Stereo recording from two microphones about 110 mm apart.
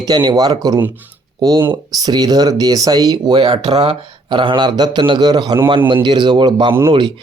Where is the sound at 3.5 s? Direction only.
60° right (ahead or behind).